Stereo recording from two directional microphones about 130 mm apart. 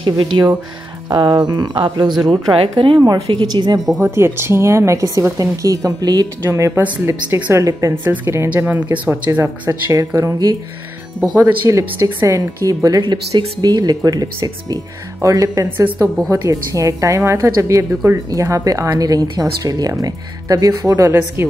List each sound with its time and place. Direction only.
0.0 s speech: 40° right (ahead or behind)
2.5 s speech: 45° right (ahead or behind)
4.0 s a woman's voice: 20° right (ahead or behind)
9.7 s a woman's voice: 25° right (ahead or behind)
11.6 s a woman's voice: 20° right (ahead or behind)